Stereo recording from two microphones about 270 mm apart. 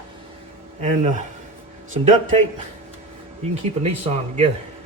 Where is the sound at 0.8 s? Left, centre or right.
Right.